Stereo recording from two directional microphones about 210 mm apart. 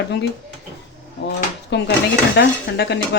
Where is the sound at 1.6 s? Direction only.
55° left (ahead or behind).